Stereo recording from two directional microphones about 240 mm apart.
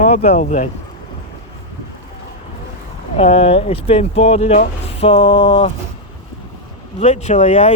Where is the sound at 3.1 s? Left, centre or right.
Left.